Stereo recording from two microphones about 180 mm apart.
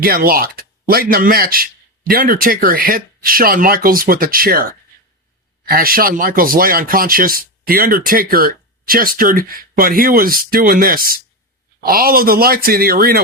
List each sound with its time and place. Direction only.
0.0 s speech: 55° right (ahead or behind)